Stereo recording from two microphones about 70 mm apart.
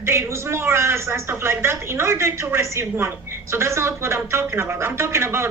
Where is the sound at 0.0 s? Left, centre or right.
Right.